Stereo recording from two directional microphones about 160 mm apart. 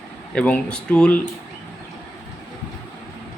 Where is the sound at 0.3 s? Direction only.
5° left (ahead or behind).